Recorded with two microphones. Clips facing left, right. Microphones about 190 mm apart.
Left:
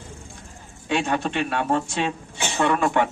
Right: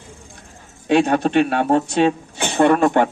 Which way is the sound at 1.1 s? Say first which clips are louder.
Right 8 dB; 55° right (ahead or behind).